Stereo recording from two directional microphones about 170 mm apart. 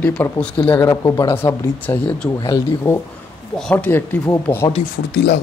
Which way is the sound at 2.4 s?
25° left (ahead or behind).